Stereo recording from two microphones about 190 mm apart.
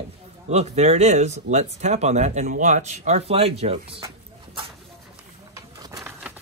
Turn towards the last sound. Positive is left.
turn(degrees=-20)  # may be behind; listen again after turning